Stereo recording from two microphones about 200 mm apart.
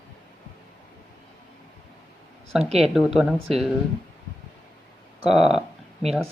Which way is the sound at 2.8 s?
Centre (ahead or behind).